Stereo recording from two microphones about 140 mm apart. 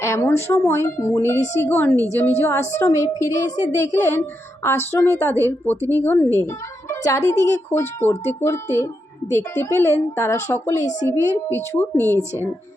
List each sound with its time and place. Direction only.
0.0 s a woman's voice: 15° left (ahead or behind)